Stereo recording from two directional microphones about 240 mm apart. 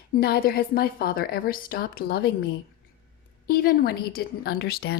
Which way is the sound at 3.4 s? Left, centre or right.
Left.